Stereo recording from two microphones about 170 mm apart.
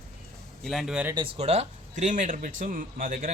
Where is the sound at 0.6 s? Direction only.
Centre (ahead or behind).